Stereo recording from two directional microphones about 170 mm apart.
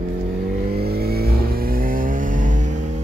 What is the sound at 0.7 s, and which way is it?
Vehicle, 65° right (ahead or behind).